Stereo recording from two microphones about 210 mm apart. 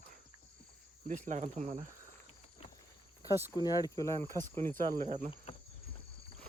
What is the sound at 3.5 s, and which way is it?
Speech, 15° left (ahead or behind).